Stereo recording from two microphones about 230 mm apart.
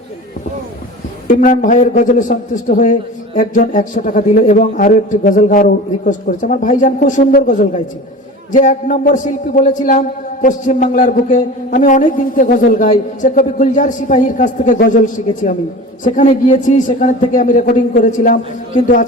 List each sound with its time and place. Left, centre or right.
1.3 s a man's voice: left